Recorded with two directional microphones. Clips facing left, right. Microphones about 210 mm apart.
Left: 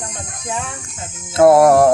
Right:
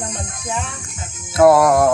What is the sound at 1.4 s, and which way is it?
Music, 25° left (ahead or behind).